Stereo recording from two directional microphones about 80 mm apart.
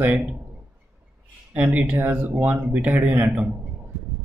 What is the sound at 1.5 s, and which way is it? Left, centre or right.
Speech, centre.